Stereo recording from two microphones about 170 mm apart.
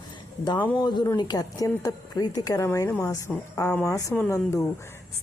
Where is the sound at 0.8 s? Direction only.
25° left (ahead or behind).